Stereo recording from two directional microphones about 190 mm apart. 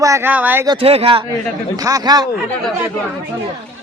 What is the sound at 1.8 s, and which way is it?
Speech, 20° right (ahead or behind).